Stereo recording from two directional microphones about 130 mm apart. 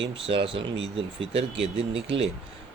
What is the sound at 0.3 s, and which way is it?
Speech, 45° right (ahead or behind).